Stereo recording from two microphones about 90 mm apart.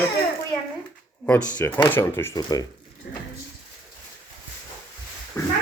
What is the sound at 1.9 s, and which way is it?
Speech, 30° left (ahead or behind).